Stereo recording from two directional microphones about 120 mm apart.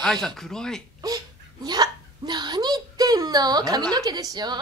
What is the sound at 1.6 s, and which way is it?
A child's voice, 35° right (ahead or behind).